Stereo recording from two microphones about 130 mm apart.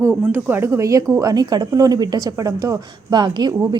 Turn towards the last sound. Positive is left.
turn(degrees=-35)  # may be behind; listen again after turning